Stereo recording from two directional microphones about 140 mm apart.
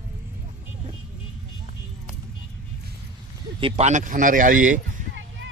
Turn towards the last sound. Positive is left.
turn(degrees=-70)  # may be behind; listen again after turning